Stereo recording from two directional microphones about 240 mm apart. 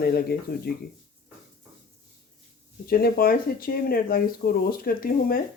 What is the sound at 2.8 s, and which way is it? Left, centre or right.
Speech, left.